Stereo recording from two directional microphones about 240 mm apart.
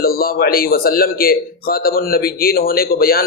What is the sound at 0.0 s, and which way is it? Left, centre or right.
Speech, left.